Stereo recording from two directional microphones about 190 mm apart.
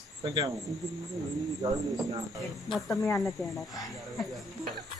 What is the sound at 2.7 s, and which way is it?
Speech, centre (ahead or behind).